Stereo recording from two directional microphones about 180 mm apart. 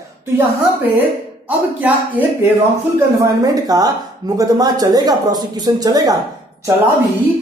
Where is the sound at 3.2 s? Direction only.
20° right (ahead or behind).